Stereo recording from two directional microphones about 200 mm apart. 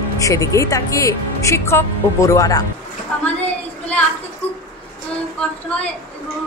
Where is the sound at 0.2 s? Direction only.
15° left (ahead or behind).